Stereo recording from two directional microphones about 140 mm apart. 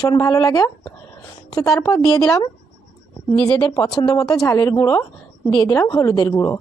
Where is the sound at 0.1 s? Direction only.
25° left (ahead or behind).